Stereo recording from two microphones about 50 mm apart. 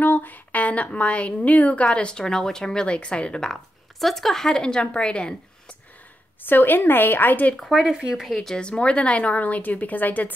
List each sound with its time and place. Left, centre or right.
0.0 s a woman's voice: left; by 3.5 s centre
4.0 s a woman's voice: centre; by 5.8 s left
6.4 s a woman's voice: left
7.7 s speech: centre
8.4 s a woman's voice: centre; by 10.3 s left